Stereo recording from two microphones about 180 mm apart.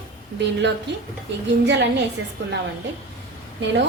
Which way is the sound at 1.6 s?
75° right (ahead or behind).